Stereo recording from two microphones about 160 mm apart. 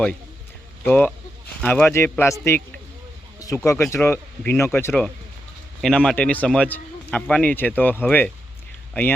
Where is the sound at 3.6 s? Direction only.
15° left (ahead or behind).